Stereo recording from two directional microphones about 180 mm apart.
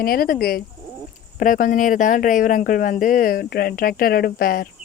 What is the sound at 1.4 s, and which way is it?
Speech, 50° left (ahead or behind).